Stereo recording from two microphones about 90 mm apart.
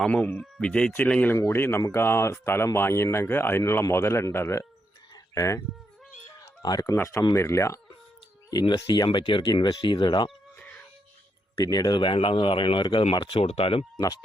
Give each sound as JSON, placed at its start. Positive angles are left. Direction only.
{"t": 0.0, "sound": "speech", "side_deg": 10}
{"t": 1.4, "sound": "speech", "side_deg": 25}
{"t": 5.1, "sound": "a sound", "side_deg": 40}
{"t": 6.6, "sound": "speech", "side_deg": 45}
{"t": 6.9, "sound": "speech", "side_deg": 30}
{"t": 8.6, "sound": "speech", "side_deg": 55}
{"t": 10.6, "sound": "music", "side_deg": 15}
{"t": 11.6, "sound": "speech", "side_deg": 45}
{"t": 11.9, "sound": "speech", "side_deg": 70}